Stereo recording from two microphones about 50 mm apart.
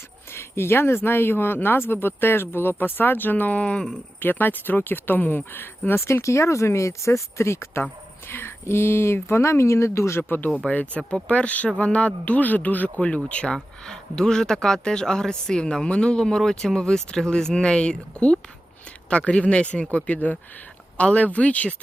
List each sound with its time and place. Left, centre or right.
0.3 s speech: left
3.6 s speech: left
4.2 s speech: left
6.1 s speech: left
8.3 s speech: left
10.2 s speech: left
10.7 s speech: left
13.5 s speech: centre; by 21.8 s left